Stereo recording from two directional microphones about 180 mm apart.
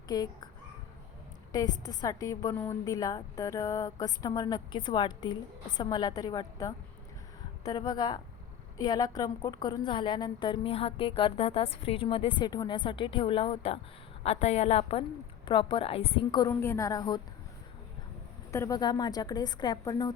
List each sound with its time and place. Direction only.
0.1 s a woman's voice: 20° left (ahead or behind)
1.5 s a woman's voice: 20° left (ahead or behind)
18.5 s a woman's voice: 20° left (ahead or behind)